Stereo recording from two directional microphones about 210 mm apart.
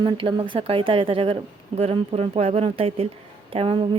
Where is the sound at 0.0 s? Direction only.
25° right (ahead or behind).